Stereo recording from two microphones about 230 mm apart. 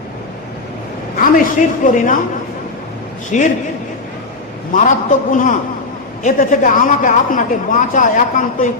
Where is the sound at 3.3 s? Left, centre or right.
Left.